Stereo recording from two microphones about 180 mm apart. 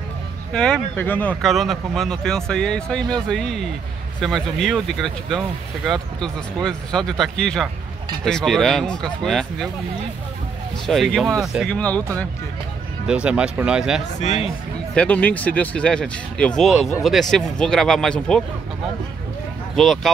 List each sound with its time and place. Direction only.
0.5 s speech: 5° left (ahead or behind)
10.9 s speech: centre (ahead or behind)
13.0 s speech: 5° right (ahead or behind)
14.2 s speech: 40° left (ahead or behind)
15.0 s speech: 10° left (ahead or behind)
19.7 s speech: centre (ahead or behind)